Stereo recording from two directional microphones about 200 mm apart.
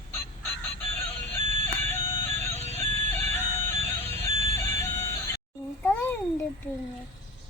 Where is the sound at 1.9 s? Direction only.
10° left (ahead or behind).